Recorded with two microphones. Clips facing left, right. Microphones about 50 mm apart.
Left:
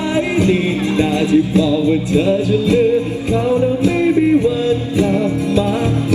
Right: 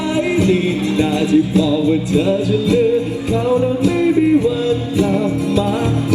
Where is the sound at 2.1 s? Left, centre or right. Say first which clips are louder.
Left 1 dB; left.